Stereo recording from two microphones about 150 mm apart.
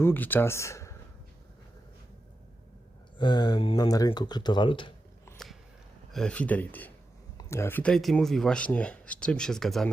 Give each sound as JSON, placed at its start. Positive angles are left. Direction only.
{"t": 0.0, "sound": "speech", "side_deg": 15}
{"t": 3.2, "sound": "speech", "side_deg": 30}
{"t": 6.1, "sound": "speech", "side_deg": 5}